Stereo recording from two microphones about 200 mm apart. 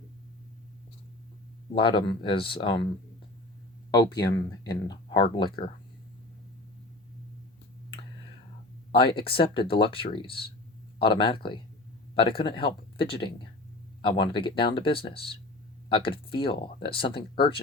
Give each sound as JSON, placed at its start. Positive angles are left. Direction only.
{"t": 1.7, "sound": "speech", "side_deg": 25}
{"t": 3.9, "sound": "speech", "side_deg": 20}
{"t": 8.9, "sound": "speech", "side_deg": 25}